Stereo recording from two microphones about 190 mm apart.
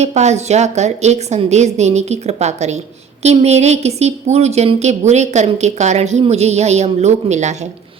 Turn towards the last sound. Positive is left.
turn(degrees=-40)  # may be behind; listen again after turning